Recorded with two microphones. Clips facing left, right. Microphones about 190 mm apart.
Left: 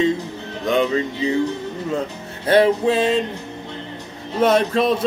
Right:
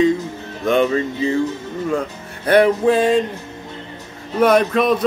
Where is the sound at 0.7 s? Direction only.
20° left (ahead or behind).